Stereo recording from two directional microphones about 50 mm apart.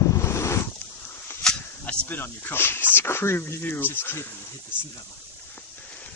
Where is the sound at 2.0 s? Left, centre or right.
Left.